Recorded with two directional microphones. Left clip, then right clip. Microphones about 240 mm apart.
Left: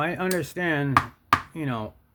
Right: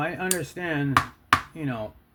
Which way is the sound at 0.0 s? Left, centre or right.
Left.